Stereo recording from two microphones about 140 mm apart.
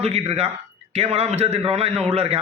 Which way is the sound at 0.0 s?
50° right (ahead or behind).